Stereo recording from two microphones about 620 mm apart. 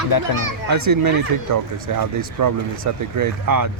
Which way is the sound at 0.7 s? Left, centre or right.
Right.